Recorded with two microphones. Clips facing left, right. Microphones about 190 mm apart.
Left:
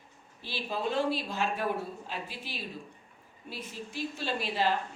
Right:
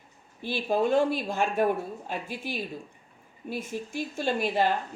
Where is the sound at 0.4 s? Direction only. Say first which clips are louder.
Right 8 dB; 50° right (ahead or behind).